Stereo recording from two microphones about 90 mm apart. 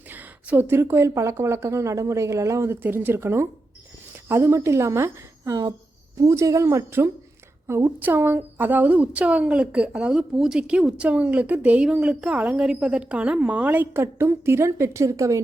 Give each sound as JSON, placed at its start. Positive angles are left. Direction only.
{"t": 0.1, "sound": "a woman's voice", "side_deg": -20}